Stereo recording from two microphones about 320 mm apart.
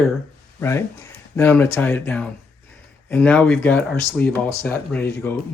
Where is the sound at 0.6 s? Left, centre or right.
Centre.